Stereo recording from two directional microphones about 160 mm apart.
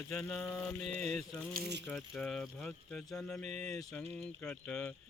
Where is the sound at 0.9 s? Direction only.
45° right (ahead or behind).